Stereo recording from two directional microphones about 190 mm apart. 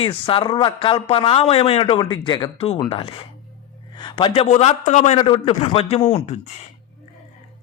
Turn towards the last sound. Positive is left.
turn(degrees=35)  # may be behind; listen again after turning